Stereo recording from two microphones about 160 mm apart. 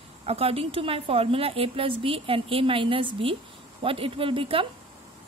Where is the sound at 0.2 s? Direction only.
40° right (ahead or behind).